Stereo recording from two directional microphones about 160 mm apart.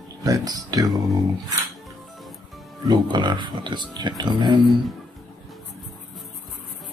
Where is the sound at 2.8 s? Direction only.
25° right (ahead or behind).